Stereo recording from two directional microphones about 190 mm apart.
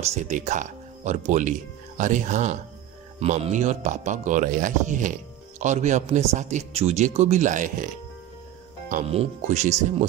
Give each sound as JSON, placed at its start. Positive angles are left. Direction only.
{"t": 0.0, "sound": "a man's voice", "side_deg": -35}